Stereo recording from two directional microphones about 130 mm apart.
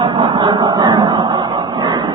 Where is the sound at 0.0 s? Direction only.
40° right (ahead or behind).